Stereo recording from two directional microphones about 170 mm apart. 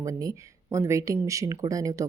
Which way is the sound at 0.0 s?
20° right (ahead or behind).